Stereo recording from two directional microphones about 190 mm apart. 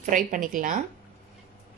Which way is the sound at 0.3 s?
45° right (ahead or behind).